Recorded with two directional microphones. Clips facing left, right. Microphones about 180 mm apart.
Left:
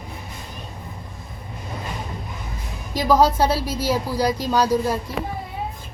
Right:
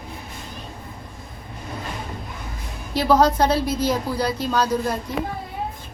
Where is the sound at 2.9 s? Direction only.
10° left (ahead or behind).